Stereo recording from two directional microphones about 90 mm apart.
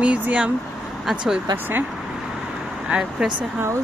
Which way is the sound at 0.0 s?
15° right (ahead or behind).